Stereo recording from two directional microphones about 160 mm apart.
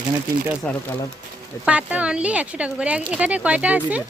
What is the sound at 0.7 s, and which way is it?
Speech, 5° left (ahead or behind).